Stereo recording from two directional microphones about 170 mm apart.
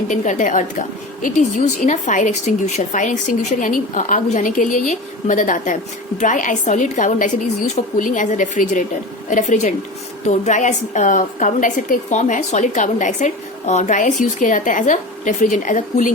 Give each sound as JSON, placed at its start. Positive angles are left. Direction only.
{"t": 0.1, "sound": "a woman's voice", "side_deg": 50}